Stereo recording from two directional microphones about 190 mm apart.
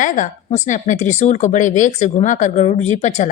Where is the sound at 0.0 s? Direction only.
40° left (ahead or behind).